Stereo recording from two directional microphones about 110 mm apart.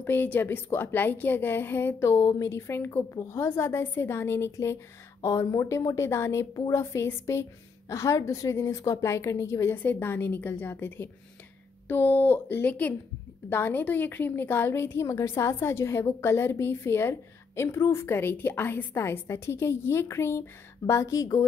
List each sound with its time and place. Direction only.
0.0 s a woman's voice: 20° left (ahead or behind)